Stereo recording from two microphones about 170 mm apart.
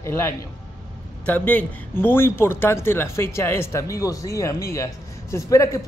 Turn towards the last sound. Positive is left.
turn(degrees=15)  # may be behind; listen again after turning